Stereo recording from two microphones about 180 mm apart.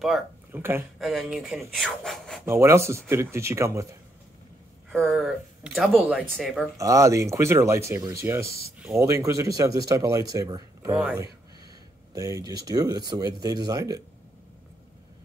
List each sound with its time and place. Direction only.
0.5 s speech: 10° right (ahead or behind)
0.9 s speech: centre (ahead or behind)
2.4 s speech: 15° right (ahead or behind)
4.9 s speech: centre (ahead or behind)
6.8 s speech: 20° right (ahead or behind)
11.0 s speech: 5° right (ahead or behind)
12.1 s speech: 20° right (ahead or behind)